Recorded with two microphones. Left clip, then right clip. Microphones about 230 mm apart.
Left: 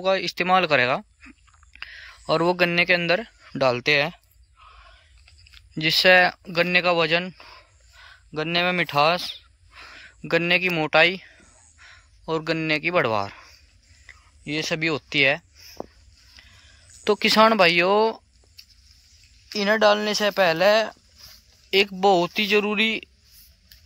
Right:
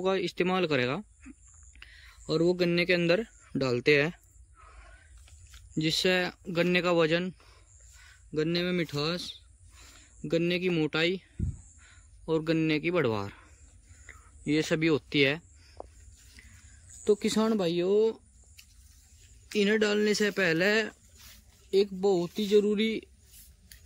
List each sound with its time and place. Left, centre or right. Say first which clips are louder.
0.0 s speech: left 6 dB; centre
5.8 s speech: left 11 dB; centre
14.0 s a sound: right 1 dB; centre
17.0 s speech: left 10 dB; left
18.0 s a sound: left 5 dB; centre
19.5 s speech: left 8 dB; centre
22.1 s speech: left 9 dB; left
22.7 s speech: left 7 dB; centre